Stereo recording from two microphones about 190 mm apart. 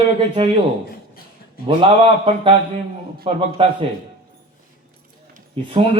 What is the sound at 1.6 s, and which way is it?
A man's voice, 30° right (ahead or behind).